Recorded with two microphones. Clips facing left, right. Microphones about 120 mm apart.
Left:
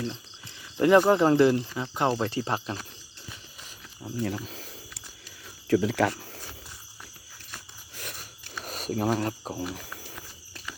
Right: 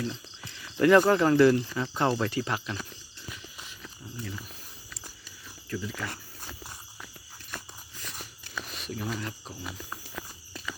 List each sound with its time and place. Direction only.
0.8 s speech: 20° left (ahead or behind)
4.0 s speech: 55° left (ahead or behind)
4.4 s snake: 90° left
5.6 s speech: 80° left
7.9 s biting: 60° left (ahead or behind)
8.6 s a sound: 45° left (ahead or behind)
9.1 s speech: 45° left (ahead or behind)